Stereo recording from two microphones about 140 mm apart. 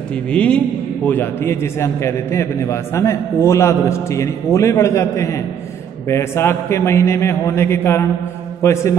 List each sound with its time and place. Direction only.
0.1 s a man's voice: 10° left (ahead or behind)